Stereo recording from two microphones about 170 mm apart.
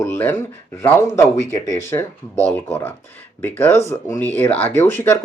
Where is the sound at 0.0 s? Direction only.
15° left (ahead or behind).